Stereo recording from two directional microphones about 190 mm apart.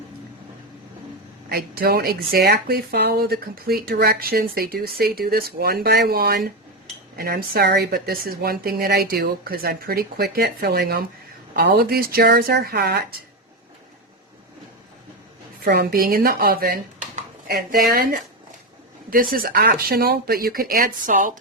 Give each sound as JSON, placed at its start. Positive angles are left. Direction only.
{"t": 1.5, "sound": "speech", "side_deg": -55}
{"t": 15.6, "sound": "speech", "side_deg": -55}